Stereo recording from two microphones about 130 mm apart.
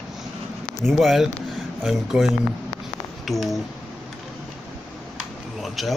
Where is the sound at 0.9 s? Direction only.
Centre (ahead or behind).